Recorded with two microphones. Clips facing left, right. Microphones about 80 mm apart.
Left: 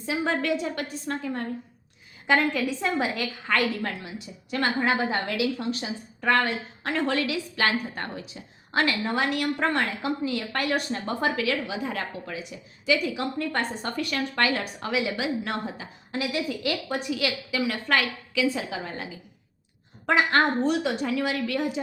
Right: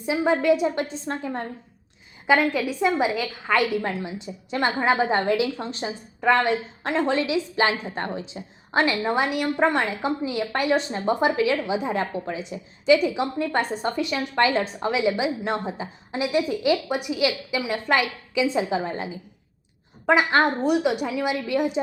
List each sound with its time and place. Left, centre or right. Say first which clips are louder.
0.0 s a woman's voice: right 5 dB; centre
2.2 s a woman's voice: right 3 dB; centre
3.4 s a woman's voice: right 4 dB; centre